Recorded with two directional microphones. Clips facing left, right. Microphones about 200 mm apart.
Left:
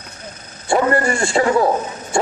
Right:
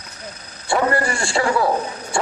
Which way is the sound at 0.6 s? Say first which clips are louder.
Left 3 dB; 25° left (ahead or behind).